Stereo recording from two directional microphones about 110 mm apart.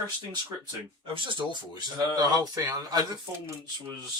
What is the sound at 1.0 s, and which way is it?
Speech, 50° right (ahead or behind).